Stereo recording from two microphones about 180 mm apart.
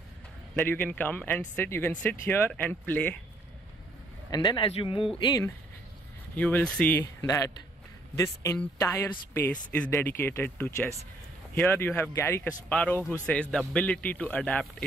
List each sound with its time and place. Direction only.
0.6 s speech: 10° left (ahead or behind)
4.3 s speech: 25° left (ahead or behind)
6.3 s speech: 10° left (ahead or behind)
7.0 s speech: 20° left (ahead or behind)
13.0 s a man's voice: 10° right (ahead or behind)
13.3 s speech: 5° left (ahead or behind)